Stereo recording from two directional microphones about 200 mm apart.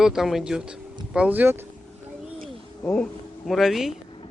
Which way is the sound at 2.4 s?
5° left (ahead or behind).